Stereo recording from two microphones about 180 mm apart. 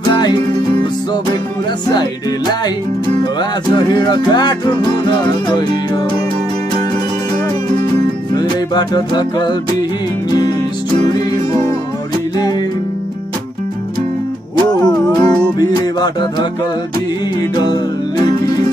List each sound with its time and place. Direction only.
0.1 s music: 25° left (ahead or behind)
3.3 s music: 25° left (ahead or behind)
8.4 s music: 25° left (ahead or behind)
14.6 s music: 25° left (ahead or behind)
17.6 s music: 25° left (ahead or behind)